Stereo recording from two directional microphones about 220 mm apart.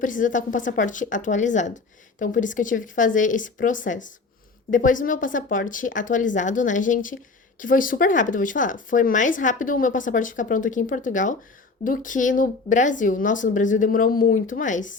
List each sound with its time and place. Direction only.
0.0 s speech: 35° left (ahead or behind)